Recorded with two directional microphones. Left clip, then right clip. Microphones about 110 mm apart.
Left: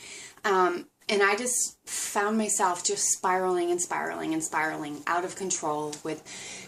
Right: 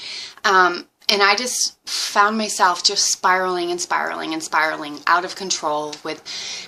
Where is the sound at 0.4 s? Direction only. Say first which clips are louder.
Right 9 dB; 35° left (ahead or behind).